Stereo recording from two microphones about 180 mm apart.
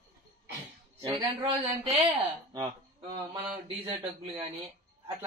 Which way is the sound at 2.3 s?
25° right (ahead or behind).